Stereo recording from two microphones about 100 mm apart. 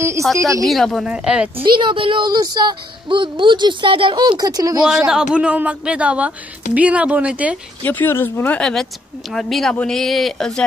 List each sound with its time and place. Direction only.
0.4 s speech: 30° right (ahead or behind)
0.7 s speech: centre (ahead or behind)
1.1 s speech: 10° right (ahead or behind)
1.6 s speech: 55° right (ahead or behind)
4.8 s speech: 5° right (ahead or behind)
7.8 s speech: 20° left (ahead or behind)
8.5 s speech: 10° left (ahead or behind)